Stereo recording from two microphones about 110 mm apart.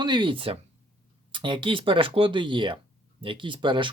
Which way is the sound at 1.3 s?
45° right (ahead or behind).